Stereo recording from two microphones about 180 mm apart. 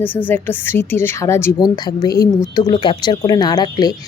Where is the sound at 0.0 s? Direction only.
10° left (ahead or behind).